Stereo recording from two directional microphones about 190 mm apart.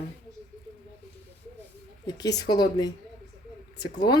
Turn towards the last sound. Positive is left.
turn(degrees=20)  # may be behind; listen again after turning